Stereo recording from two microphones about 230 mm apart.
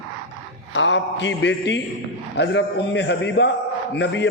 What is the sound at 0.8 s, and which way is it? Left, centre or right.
A man's voice, left.